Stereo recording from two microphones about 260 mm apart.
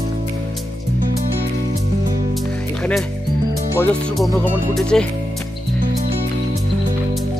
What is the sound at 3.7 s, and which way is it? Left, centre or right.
Speech, centre.